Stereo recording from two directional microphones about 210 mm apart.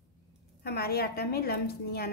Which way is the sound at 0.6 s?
45° left (ahead or behind).